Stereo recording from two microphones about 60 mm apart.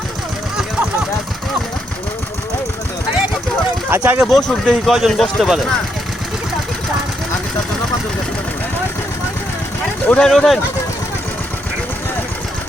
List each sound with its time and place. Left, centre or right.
3.8 s speech: right
4.2 s speech: centre
10.2 s speech: centre